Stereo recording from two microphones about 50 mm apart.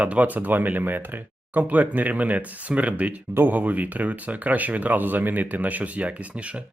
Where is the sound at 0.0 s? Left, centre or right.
Right.